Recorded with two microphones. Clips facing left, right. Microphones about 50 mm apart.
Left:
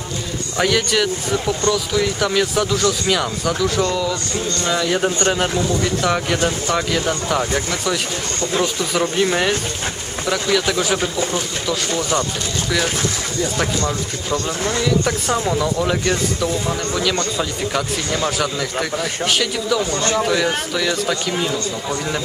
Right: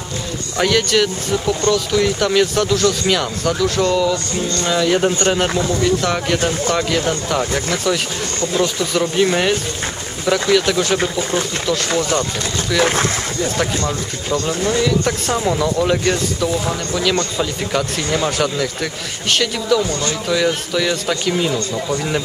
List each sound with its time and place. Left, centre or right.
0.6 s speech: centre
9.1 s speech: centre
14.3 s speech: left
15.0 s speech: centre
19.9 s speech: left
20.7 s speech: centre